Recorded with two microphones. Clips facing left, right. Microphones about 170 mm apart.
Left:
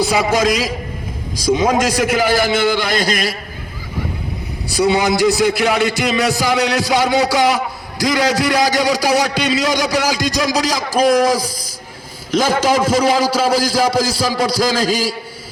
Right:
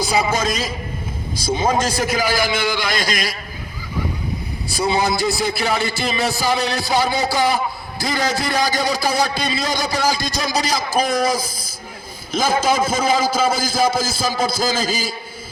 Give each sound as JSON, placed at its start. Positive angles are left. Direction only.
{"t": 0.0, "sound": "music", "side_deg": 70}
{"t": 2.0, "sound": "a man's voice", "side_deg": 65}
{"t": 4.8, "sound": "music", "side_deg": 75}
{"t": 6.6, "sound": "a man's voice", "side_deg": 80}